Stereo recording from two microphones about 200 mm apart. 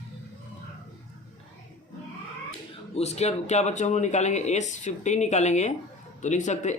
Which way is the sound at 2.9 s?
35° left (ahead or behind).